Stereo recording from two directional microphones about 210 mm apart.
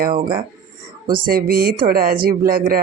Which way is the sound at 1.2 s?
45° right (ahead or behind).